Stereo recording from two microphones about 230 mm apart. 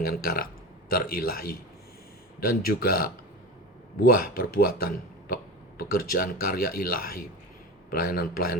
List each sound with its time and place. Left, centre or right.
0.0 s speech: left